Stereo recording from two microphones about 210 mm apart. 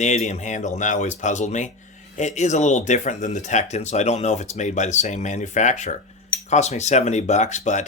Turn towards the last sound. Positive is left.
turn(degrees=35)  # may be behind; listen again after turning